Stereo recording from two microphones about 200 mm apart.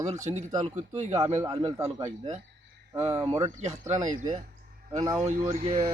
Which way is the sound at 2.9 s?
15° right (ahead or behind).